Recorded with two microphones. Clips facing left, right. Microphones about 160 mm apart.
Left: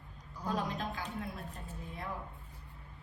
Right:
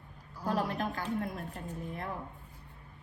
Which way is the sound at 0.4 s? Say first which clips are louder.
Right 4 dB; 60° right (ahead or behind).